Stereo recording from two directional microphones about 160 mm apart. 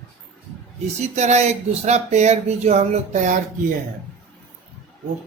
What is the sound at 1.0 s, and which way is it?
Speech, 45° right (ahead or behind).